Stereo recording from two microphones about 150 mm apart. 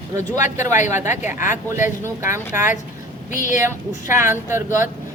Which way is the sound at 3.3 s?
60° left (ahead or behind).